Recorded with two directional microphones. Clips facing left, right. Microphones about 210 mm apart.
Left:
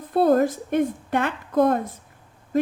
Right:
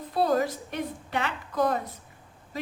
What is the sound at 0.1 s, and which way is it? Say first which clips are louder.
A woman's voice: left 7 dB; 50° left (ahead or behind).